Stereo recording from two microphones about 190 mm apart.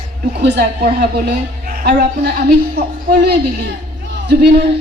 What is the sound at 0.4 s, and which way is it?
A woman's voice, 60° right (ahead or behind).